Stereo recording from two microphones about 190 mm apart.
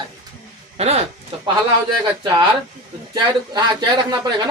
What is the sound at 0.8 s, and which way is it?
Speech, 35° right (ahead or behind).